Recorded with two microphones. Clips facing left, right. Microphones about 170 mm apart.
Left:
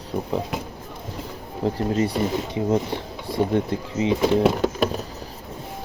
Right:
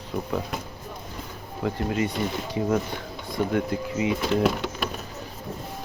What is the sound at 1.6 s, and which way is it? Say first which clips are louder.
Speech: left 4 dB; 35° left (ahead or behind).